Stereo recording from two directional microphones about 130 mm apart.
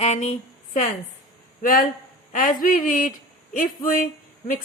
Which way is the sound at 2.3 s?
90° left.